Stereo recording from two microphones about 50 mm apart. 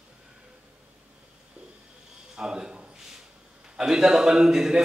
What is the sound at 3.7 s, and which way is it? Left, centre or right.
A man's voice, centre.